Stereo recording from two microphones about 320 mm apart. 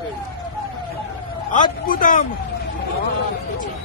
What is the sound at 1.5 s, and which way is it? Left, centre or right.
Speech, left.